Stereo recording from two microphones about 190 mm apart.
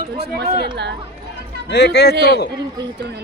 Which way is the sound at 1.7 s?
60° left (ahead or behind).